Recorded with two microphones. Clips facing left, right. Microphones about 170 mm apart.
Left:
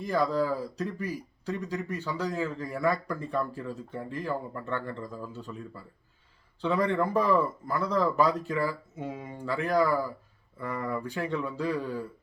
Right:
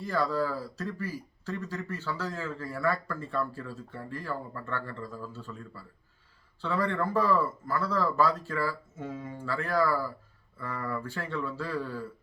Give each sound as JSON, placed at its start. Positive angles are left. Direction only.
{"t": 0.0, "sound": "speech", "side_deg": 15}